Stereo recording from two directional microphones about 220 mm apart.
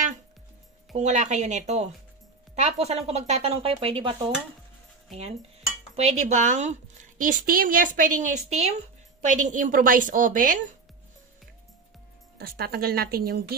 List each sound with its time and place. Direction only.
0.9 s a woman's voice: 30° right (ahead or behind)
5.9 s a woman's voice: 30° right (ahead or behind)
12.4 s speech: 45° right (ahead or behind)